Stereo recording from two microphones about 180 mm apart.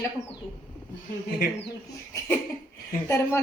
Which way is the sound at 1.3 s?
55° left (ahead or behind).